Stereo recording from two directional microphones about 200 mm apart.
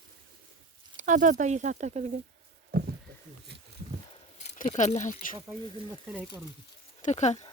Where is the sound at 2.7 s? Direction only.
55° right (ahead or behind).